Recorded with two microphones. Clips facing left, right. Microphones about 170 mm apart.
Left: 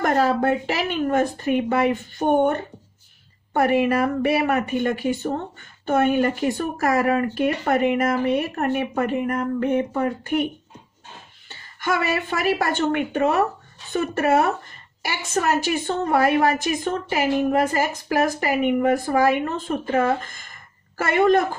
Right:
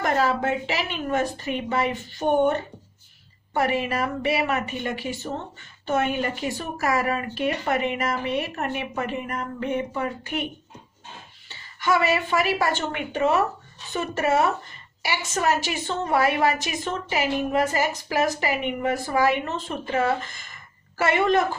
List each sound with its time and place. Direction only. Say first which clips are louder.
0.0 s a woman's voice: left 3 dB; 50° left (ahead or behind)